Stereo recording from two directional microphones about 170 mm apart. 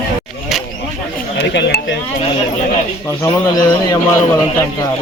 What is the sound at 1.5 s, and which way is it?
Speech, 90° left.